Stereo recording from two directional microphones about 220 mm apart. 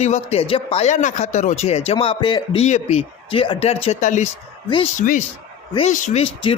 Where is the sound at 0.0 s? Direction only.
30° left (ahead or behind).